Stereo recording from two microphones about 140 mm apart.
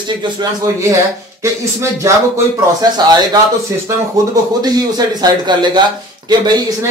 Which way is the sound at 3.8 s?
25° right (ahead or behind).